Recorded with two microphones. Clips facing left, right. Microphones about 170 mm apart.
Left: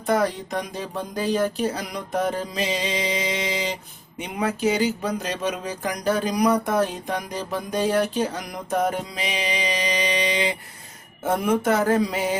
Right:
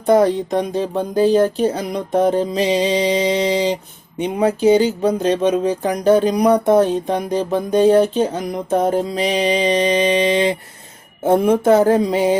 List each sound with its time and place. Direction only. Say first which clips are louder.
0.0 s speech: right 9 dB; 25° right (ahead or behind)
8.7 s music: right 7 dB; 30° right (ahead or behind)
11.2 s speech: right 8 dB; 30° right (ahead or behind)